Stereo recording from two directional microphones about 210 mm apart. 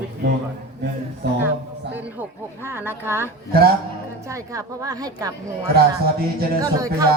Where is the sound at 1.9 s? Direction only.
10° right (ahead or behind).